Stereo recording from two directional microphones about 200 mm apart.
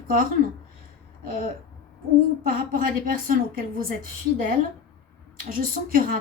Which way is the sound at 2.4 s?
45° right (ahead or behind).